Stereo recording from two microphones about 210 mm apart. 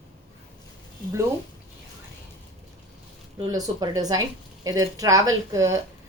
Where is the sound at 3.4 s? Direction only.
20° right (ahead or behind).